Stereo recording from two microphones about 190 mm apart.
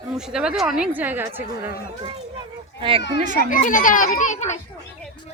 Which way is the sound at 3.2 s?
40° right (ahead or behind).